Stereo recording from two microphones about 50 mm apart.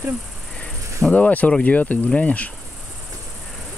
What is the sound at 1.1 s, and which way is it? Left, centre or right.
Speech, left.